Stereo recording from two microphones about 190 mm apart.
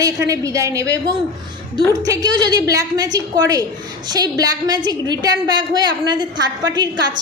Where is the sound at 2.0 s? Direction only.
20° right (ahead or behind).